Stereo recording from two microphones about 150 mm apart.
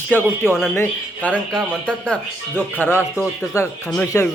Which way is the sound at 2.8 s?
15° left (ahead or behind).